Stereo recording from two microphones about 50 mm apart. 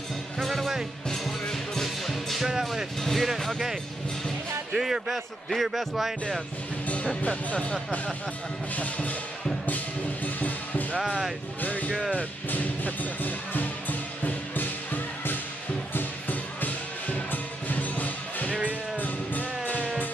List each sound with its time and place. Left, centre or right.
0.4 s music: centre
2.4 s music: centre
3.0 s music: centre
3.3 s a man's voice: centre
4.7 s a man's voice: centre
7.2 s speech: left
10.2 s music: left
11.0 s speech: centre
11.6 s speech: left
12.4 s music: left
18.5 s music: right
18.9 s music: left